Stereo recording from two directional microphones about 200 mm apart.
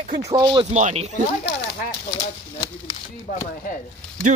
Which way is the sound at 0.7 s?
35° right (ahead or behind).